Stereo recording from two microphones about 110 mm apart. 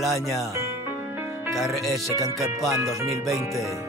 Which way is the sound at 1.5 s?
Centre (ahead or behind).